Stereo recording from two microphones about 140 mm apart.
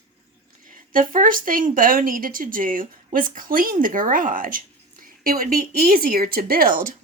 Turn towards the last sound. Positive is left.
turn(degrees=-80)